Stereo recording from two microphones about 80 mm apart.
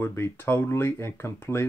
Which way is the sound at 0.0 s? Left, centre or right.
Left.